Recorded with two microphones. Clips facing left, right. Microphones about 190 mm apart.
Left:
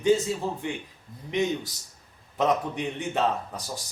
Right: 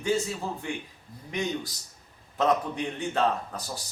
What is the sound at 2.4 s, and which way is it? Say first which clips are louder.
A man's voice: even; 20° left (ahead or behind).